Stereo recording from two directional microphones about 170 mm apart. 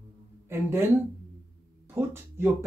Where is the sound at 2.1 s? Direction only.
15° right (ahead or behind).